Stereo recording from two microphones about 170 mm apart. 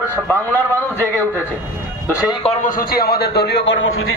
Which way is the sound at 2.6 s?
60° left (ahead or behind).